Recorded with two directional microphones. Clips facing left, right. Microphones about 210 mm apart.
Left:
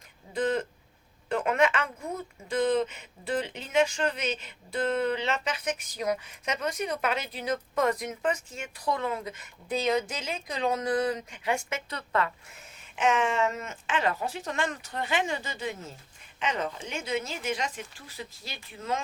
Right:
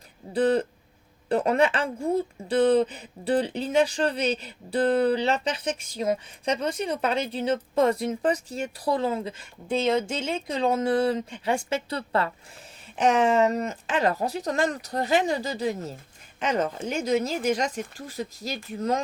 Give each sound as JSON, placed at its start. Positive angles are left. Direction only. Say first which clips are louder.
{"t": 0.3, "sound": "speech", "louder": "right 6 dB", "side_deg": -35}